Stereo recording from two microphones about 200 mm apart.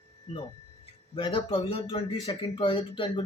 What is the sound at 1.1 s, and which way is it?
Speech, 25° left (ahead or behind).